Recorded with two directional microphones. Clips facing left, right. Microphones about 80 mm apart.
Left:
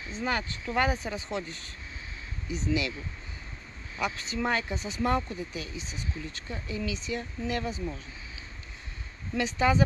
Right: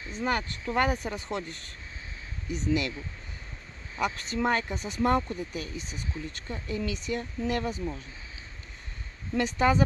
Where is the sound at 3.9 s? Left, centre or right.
Right.